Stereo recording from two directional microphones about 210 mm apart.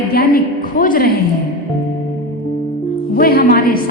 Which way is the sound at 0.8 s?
40° left (ahead or behind).